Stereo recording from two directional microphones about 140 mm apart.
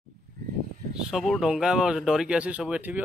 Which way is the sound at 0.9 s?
Centre (ahead or behind).